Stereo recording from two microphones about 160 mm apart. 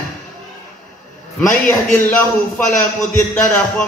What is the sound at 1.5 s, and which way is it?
A man's voice, 5° left (ahead or behind).